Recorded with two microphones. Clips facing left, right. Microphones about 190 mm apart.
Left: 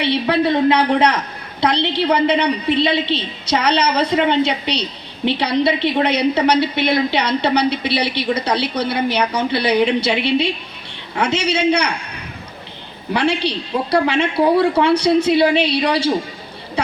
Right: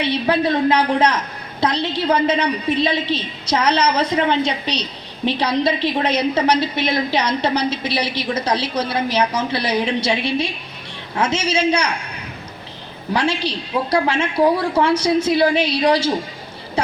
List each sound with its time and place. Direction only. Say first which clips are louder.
0.0 s a woman's voice: left 1 dB; 65° left (ahead or behind)
13.1 s a woman's voice: left 2 dB; 65° left (ahead or behind)